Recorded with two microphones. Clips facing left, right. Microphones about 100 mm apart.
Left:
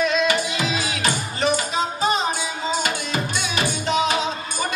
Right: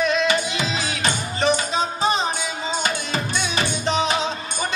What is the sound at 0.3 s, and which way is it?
Music, 20° right (ahead or behind).